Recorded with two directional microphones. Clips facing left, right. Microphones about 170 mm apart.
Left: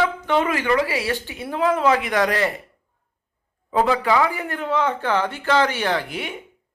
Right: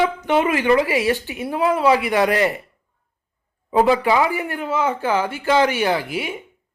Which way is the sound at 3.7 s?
15° right (ahead or behind).